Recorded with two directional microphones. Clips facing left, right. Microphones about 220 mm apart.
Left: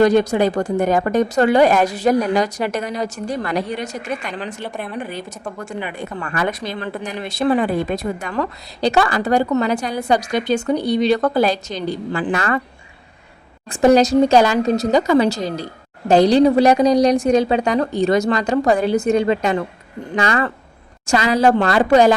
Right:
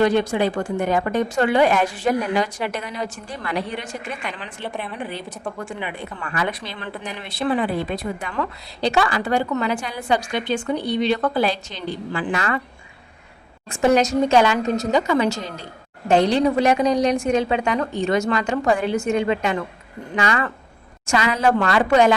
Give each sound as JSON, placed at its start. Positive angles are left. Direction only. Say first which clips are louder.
{"t": 0.0, "sound": "speech", "louder": "left 4 dB", "side_deg": 40}
{"t": 13.7, "sound": "speech", "louder": "left 5 dB", "side_deg": 35}